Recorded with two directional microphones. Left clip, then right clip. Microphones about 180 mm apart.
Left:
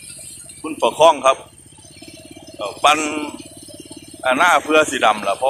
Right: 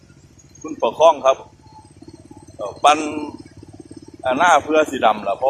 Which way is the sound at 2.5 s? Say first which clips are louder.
Even; 10° left (ahead or behind).